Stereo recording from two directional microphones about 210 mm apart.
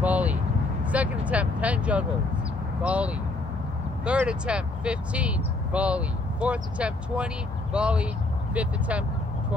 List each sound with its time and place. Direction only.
0.0 s vehicle: 5° right (ahead or behind)
0.8 s speech: 5° right (ahead or behind)